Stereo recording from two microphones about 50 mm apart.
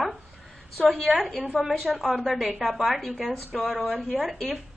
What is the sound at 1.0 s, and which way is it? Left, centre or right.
Speech, centre.